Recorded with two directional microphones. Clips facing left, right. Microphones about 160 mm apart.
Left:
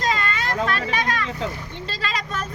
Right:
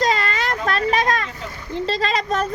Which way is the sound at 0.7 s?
40° right (ahead or behind).